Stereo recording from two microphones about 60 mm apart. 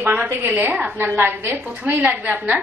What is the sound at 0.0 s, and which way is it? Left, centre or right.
Speech, right.